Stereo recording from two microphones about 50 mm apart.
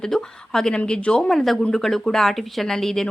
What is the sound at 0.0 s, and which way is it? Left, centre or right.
Speech, centre.